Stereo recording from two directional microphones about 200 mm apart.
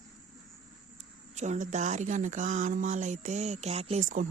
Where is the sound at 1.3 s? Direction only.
35° right (ahead or behind).